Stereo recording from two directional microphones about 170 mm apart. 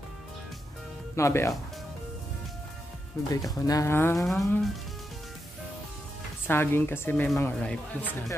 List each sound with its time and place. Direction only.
1.1 s a woman's voice: 15° left (ahead or behind)
3.3 s speech: 20° left (ahead or behind)
4.2 s music: centre (ahead or behind)
6.4 s a woman's voice: 15° left (ahead or behind)